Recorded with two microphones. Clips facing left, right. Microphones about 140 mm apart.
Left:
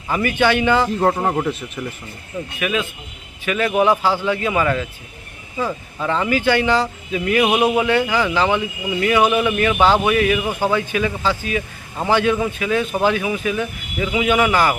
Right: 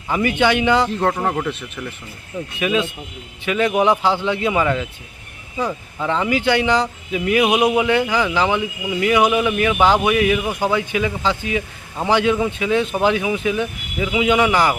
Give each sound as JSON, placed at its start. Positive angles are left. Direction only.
{"t": 0.1, "sound": "speech", "side_deg": -15}
{"t": 0.9, "sound": "speech", "side_deg": 5}
{"t": 2.6, "sound": "a man's voice", "side_deg": -25}
{"t": 6.0, "sound": "a man's voice", "side_deg": -15}